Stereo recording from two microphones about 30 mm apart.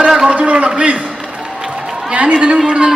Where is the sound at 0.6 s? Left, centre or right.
Right.